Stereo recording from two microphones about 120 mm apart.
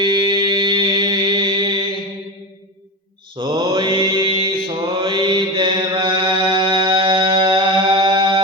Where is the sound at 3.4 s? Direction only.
45° right (ahead or behind).